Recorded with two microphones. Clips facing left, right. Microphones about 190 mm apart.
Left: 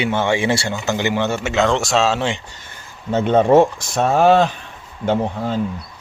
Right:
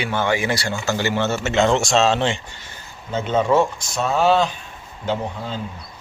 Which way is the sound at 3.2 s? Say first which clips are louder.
Left 5 dB; 60° left (ahead or behind).